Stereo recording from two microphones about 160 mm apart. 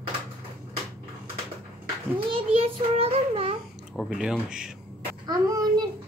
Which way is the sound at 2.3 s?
40° right (ahead or behind).